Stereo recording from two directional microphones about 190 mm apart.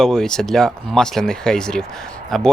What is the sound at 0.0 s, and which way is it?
Speech, 5° left (ahead or behind).